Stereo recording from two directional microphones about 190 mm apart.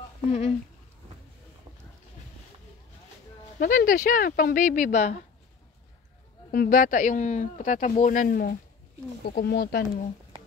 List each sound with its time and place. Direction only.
0.3 s speech: 35° left (ahead or behind)
3.5 s speech: 45° left (ahead or behind)
6.5 s speech: 50° left (ahead or behind)